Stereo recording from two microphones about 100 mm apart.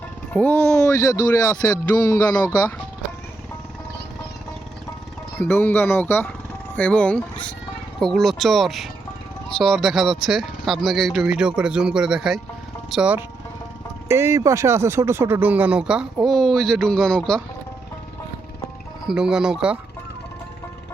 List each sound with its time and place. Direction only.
0.3 s speech: 20° left (ahead or behind)
2.0 s music: 40° left (ahead or behind)
5.4 s speech: 20° left (ahead or behind)
7.9 s speech: centre (ahead or behind)
14.1 s speech: 30° right (ahead or behind); by 16.0 s 10° right (ahead or behind)
16.2 s speech: 5° left (ahead or behind)
19.0 s speech: 5° right (ahead or behind)